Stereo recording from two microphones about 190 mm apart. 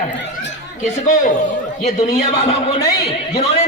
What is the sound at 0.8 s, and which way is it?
A man's voice, 40° left (ahead or behind).